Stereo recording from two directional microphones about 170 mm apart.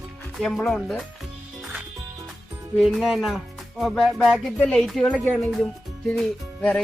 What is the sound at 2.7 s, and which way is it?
Speech, centre (ahead or behind).